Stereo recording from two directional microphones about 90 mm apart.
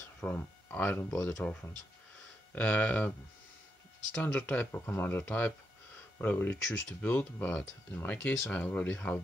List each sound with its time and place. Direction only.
0.2 s speech: 15° left (ahead or behind)
4.1 s speech: 15° left (ahead or behind)